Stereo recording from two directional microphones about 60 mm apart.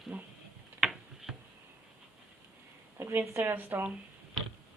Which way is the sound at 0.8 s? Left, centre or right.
Centre.